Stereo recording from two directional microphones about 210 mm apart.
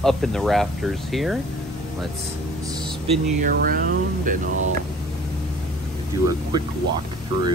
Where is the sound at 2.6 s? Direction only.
20° right (ahead or behind).